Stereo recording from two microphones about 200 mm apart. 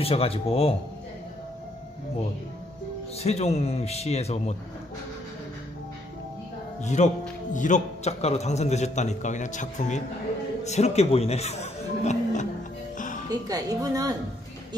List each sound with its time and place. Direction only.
0.0 s speech: 30° left (ahead or behind)
3.2 s a man's voice: 30° left (ahead or behind)
6.8 s a man's voice: 35° left (ahead or behind)
12.9 s music: 40° left (ahead or behind)
13.5 s a woman's voice: 20° right (ahead or behind)